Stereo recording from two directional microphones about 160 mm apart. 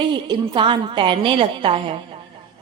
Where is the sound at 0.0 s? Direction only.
30° right (ahead or behind).